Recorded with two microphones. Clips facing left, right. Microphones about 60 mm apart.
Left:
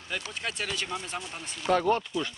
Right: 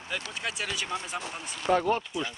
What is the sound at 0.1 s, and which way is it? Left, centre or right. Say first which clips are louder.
Speech: even; centre.